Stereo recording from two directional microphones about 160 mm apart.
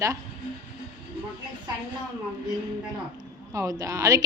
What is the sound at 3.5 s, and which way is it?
Speech, 20° right (ahead or behind).